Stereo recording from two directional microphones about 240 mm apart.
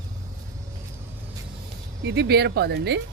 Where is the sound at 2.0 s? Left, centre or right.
Right.